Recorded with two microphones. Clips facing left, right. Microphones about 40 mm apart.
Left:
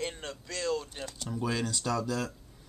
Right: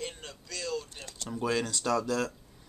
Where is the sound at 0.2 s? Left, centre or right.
Left.